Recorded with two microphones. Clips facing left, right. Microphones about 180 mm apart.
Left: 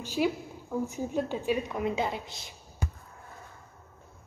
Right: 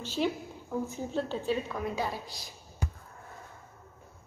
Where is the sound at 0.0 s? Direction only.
10° left (ahead or behind).